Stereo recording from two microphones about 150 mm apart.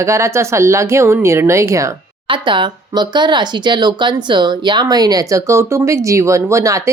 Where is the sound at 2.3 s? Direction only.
30° right (ahead or behind).